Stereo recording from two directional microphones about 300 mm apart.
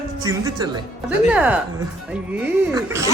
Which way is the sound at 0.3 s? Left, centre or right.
Centre.